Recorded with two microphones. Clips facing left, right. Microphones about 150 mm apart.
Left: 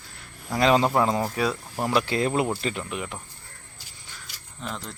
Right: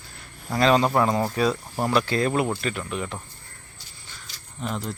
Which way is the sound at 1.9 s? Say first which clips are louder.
Right 1 dB; 20° left (ahead or behind).